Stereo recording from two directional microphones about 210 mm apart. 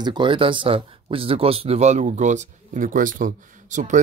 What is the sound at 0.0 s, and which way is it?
Speech, 20° right (ahead or behind).